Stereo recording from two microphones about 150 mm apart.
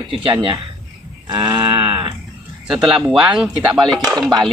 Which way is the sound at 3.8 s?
25° right (ahead or behind).